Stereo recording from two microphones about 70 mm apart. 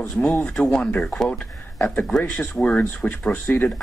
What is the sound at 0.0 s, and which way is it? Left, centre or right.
Speech, left.